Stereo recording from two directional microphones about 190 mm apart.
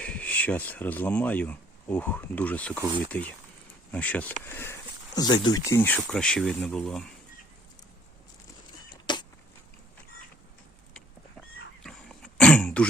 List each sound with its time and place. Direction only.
0.0 s speech: 5° left (ahead or behind)
9.1 s a sound: 25° left (ahead or behind)
11.8 s throat clearing: centre (ahead or behind)